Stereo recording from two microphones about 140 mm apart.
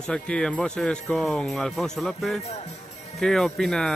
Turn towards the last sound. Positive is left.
turn(degrees=0)  # may be behind; listen again after turning